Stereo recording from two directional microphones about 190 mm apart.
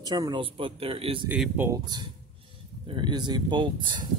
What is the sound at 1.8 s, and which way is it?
Speech, 20° right (ahead or behind).